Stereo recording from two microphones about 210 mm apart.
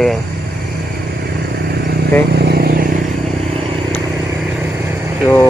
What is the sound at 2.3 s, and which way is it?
Vehicle, 50° right (ahead or behind).